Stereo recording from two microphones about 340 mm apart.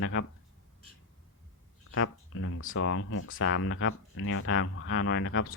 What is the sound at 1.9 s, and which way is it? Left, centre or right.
Speech, left.